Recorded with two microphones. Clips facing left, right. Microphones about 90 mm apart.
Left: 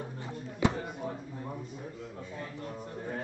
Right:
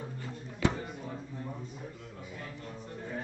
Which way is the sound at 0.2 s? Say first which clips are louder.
Left 2 dB; 20° left (ahead or behind).